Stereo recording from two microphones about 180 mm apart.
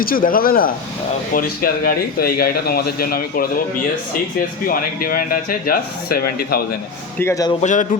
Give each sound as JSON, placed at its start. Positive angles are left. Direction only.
{"t": 0.0, "sound": "speech", "side_deg": 50}
{"t": 7.2, "sound": "speech", "side_deg": 15}
{"t": 7.6, "sound": "speech", "side_deg": 45}